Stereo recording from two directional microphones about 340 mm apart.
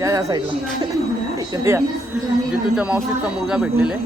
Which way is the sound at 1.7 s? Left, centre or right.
Centre.